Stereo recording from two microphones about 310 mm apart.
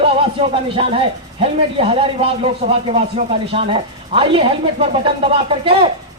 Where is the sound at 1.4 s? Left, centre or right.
Centre.